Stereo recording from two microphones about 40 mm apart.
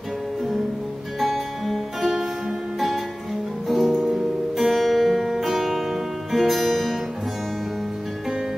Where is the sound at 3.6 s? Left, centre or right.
Centre.